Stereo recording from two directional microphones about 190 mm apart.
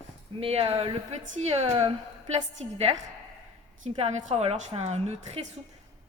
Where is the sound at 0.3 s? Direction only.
30° right (ahead or behind).